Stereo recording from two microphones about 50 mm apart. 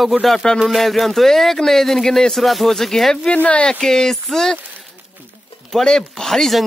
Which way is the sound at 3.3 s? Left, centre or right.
Left.